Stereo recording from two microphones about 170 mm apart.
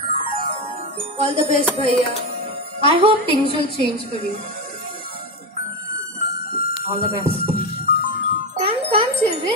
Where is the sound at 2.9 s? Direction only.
30° right (ahead or behind).